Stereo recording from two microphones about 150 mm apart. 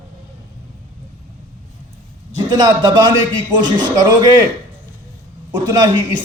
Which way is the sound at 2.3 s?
25° right (ahead or behind).